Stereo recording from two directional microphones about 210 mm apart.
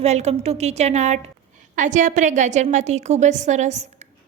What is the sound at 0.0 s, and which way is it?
A woman's voice, 30° right (ahead or behind).